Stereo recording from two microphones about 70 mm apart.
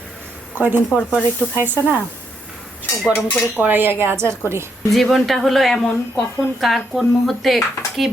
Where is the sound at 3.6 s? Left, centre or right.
Right.